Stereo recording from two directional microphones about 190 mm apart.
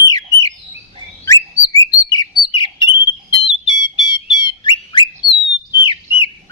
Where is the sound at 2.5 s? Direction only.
25° left (ahead or behind).